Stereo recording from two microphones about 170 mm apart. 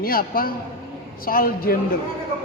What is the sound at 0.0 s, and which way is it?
A woman's voice, 60° left (ahead or behind).